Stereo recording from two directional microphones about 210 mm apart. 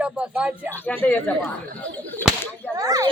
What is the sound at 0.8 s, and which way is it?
Speech, 5° left (ahead or behind).